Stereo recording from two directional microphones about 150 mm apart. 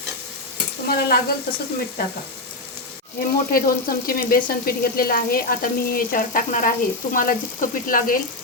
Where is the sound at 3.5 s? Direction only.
75° left (ahead or behind).